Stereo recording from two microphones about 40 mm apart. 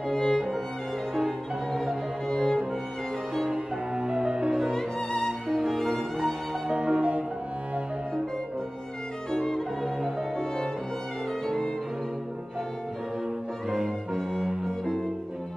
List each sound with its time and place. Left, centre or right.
0.1 s music: centre
2.2 s music: centre
3.5 s music: right
4.7 s music: centre
6.7 s music: right
9.3 s violin: centre
11.4 s violin: centre
13.7 s music: centre